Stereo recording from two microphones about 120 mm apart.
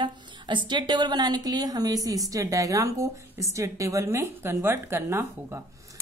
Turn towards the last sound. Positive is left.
turn(degrees=-20)  # may be behind; listen again after turning